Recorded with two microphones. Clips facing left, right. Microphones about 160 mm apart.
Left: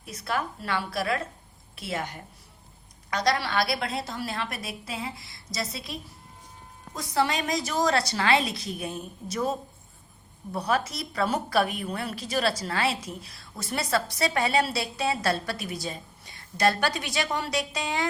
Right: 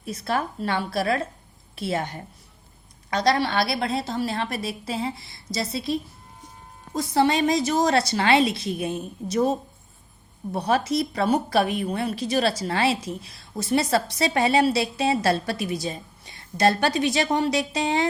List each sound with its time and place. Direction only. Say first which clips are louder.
0.0 s a woman's voice: right 4 dB; 30° right (ahead or behind)